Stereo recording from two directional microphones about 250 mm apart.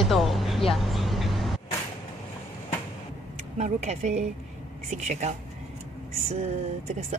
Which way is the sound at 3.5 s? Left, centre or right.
Right.